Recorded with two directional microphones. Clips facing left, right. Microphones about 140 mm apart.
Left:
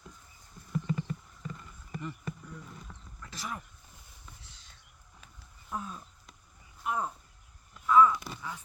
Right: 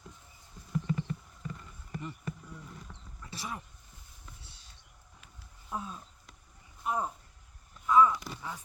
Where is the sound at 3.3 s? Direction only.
30° right (ahead or behind).